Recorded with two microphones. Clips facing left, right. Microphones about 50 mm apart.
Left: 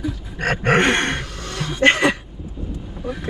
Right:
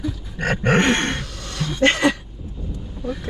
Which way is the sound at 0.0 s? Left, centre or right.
Centre.